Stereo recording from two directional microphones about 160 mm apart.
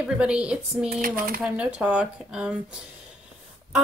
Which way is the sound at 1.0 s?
60° right (ahead or behind).